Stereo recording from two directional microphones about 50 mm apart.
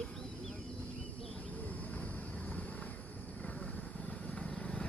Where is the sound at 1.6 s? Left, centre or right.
Left.